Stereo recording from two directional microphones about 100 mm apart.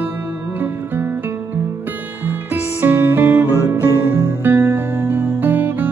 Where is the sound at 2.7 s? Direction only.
25° right (ahead or behind).